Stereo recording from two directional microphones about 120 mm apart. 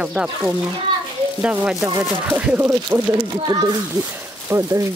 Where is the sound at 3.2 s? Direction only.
35° right (ahead or behind).